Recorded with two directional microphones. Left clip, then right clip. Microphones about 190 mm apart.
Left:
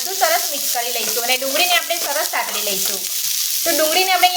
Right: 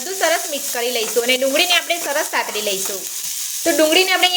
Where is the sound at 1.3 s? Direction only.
50° right (ahead or behind).